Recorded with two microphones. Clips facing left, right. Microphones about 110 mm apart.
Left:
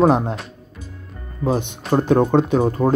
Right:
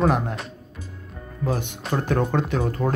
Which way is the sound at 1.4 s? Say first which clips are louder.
Left 5 dB; 25° left (ahead or behind).